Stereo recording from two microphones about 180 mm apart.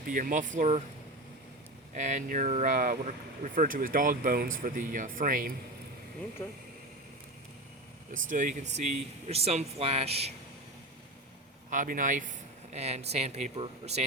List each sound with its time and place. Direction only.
0.1 s speech: 50° right (ahead or behind)
1.9 s speech: 45° right (ahead or behind)
6.4 s speech: 15° left (ahead or behind)
8.1 s speech: 45° right (ahead or behind)
11.7 s speech: 45° right (ahead or behind)